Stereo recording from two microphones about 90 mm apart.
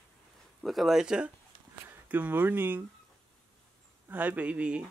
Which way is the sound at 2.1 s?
20° right (ahead or behind).